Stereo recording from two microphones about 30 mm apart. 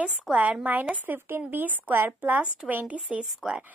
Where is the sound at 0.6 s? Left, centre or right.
Right.